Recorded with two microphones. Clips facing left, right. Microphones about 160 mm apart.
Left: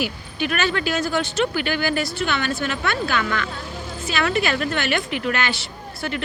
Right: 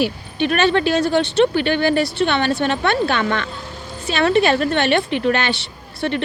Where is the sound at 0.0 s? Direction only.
30° right (ahead or behind).